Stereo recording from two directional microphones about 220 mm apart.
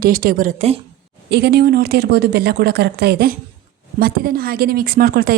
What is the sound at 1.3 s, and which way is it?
A woman's voice, 50° right (ahead or behind).